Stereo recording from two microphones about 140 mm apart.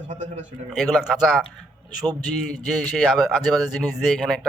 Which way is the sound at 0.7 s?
Centre (ahead or behind).